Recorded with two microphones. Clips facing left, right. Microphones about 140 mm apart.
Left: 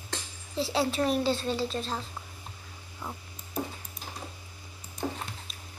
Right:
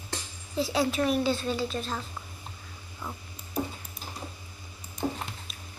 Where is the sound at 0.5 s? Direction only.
30° left (ahead or behind).